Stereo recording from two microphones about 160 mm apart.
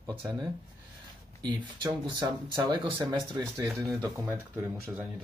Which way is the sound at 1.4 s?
30° right (ahead or behind).